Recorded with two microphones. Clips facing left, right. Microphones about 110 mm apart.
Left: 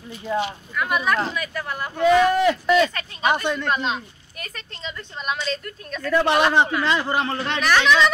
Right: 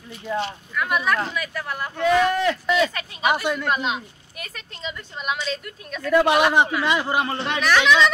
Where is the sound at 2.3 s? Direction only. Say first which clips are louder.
Left 3 dB; 10° left (ahead or behind).